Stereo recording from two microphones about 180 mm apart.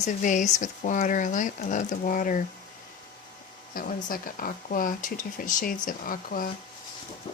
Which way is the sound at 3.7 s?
55° left (ahead or behind).